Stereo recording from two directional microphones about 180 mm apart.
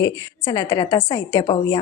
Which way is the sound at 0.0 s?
20° left (ahead or behind).